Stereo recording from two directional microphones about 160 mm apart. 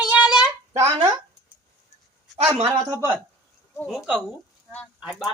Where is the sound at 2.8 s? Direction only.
20° right (ahead or behind).